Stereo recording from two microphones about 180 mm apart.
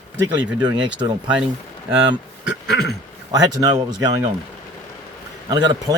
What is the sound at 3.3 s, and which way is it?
Speech, 20° right (ahead or behind).